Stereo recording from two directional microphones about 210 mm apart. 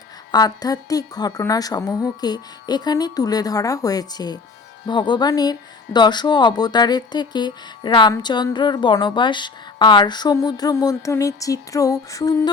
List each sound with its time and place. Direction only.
0.3 s a woman's voice: 20° left (ahead or behind)